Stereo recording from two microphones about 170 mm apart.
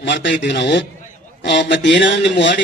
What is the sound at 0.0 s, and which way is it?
A man's voice, 90° left.